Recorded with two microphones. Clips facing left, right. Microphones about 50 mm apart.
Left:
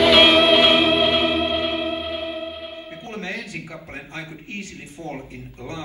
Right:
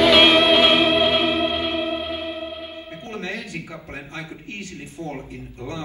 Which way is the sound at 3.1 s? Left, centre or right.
Left.